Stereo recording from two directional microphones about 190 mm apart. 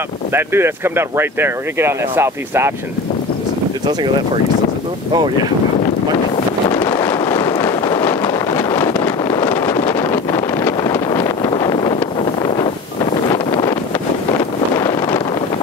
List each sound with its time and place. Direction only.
0.3 s speech: 10° right (ahead or behind)
6.3 s wind noise: 25° left (ahead or behind)
14.8 s wind noise: 20° left (ahead or behind)